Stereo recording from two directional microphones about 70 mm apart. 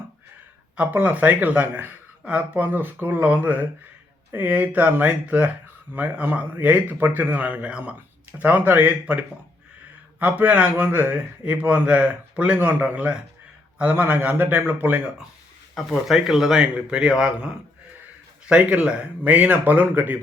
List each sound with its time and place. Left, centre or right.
0.8 s speech: right
15.7 s a man's voice: centre; by 20.1 s right